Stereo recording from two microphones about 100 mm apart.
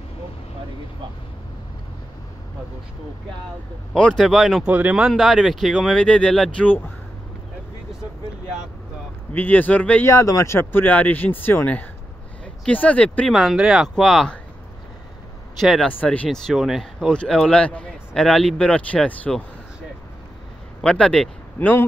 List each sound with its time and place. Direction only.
3.9 s speech: 5° left (ahead or behind)
4.6 s speech: 15° right (ahead or behind)
4.9 s speech: centre (ahead or behind); by 6.9 s 15° left (ahead or behind)
9.3 s a man's voice: 15° left (ahead or behind)
10.0 s a man's voice: 30° left (ahead or behind); by 13.3 s 15° left (ahead or behind)
13.3 s speech: 5° right (ahead or behind)
15.6 s speech: centre (ahead or behind)
15.9 s a man's voice: 15° left (ahead or behind)
16.3 s a man's voice: centre (ahead or behind)
20.8 s a man's voice: 10° left (ahead or behind)
21.5 s speech: 20° left (ahead or behind)